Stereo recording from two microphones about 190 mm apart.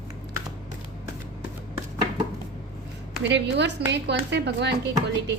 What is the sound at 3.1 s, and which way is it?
A woman's voice, 65° right (ahead or behind).